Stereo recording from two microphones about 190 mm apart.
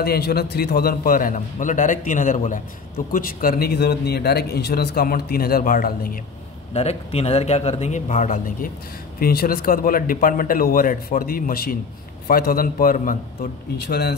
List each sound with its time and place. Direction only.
0.0 s a man's voice: 55° left (ahead or behind)
6.7 s a man's voice: 35° left (ahead or behind)
9.2 s a man's voice: 55° left (ahead or behind)
13.7 s speech: 55° left (ahead or behind)